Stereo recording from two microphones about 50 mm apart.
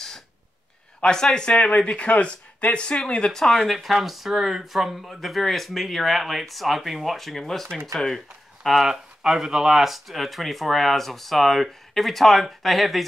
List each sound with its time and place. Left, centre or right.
1.0 s speech: centre
3.7 s speech: centre